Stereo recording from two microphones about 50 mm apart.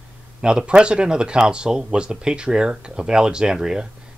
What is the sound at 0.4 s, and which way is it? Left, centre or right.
Speech, centre.